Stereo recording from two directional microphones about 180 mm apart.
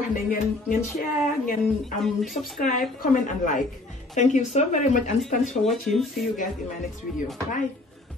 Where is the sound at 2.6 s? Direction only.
45° left (ahead or behind).